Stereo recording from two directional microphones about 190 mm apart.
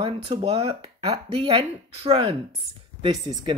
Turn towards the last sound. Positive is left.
turn(degrees=-25)  # may be behind; listen again after turning